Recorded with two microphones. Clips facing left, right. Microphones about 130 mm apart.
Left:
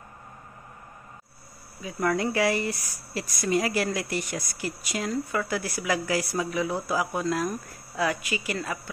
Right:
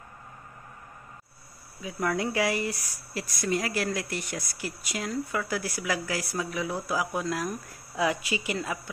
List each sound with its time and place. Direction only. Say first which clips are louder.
1.8 s speech: left 3 dB; 5° right (ahead or behind)